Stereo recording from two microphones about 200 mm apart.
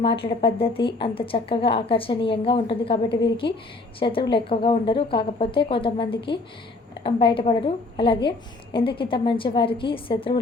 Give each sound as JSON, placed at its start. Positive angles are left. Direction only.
{"t": 0.0, "sound": "a woman's voice", "side_deg": 25}